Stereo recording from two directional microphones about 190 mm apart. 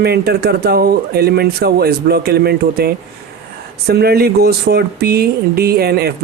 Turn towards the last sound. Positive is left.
turn(degrees=-55)  # may be behind; listen again after turning